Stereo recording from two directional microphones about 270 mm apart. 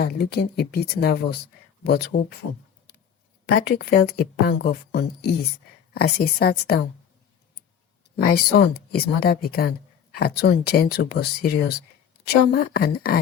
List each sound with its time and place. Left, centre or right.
0.0 s speech: left
3.4 s speech: left
8.1 s speech: left